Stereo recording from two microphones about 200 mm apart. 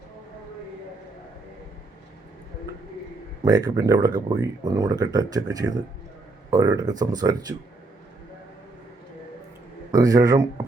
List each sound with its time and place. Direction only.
3.4 s speech: 20° right (ahead or behind)
9.9 s a man's voice: 15° right (ahead or behind)